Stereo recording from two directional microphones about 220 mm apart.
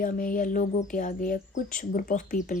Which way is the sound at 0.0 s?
40° left (ahead or behind).